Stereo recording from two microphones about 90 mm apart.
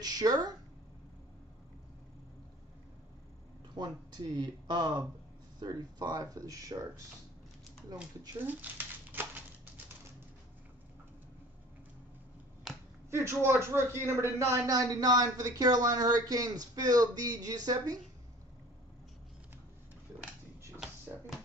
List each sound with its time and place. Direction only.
0.0 s speech: 45° right (ahead or behind)
3.7 s speech: 50° right (ahead or behind)
9.1 s a sound: 20° right (ahead or behind)
13.1 s a man's voice: 30° right (ahead or behind)
14.7 s speech: 45° right (ahead or behind)